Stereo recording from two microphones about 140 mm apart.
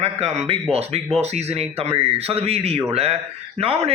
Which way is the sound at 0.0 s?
50° right (ahead or behind).